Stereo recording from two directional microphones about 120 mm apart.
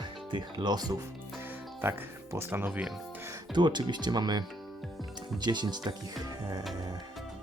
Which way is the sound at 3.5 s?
40° right (ahead or behind).